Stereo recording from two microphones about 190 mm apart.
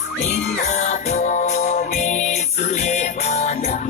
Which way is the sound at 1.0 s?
40° left (ahead or behind).